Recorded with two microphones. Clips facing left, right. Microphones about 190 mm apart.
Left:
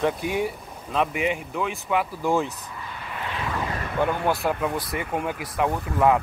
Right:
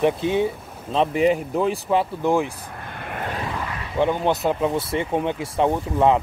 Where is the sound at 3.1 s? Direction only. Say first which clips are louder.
Right 4 dB; 50° right (ahead or behind).